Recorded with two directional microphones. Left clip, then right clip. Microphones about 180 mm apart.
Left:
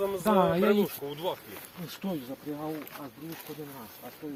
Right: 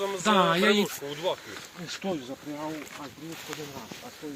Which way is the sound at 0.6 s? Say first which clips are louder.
Right 2 dB; 45° left (ahead or behind).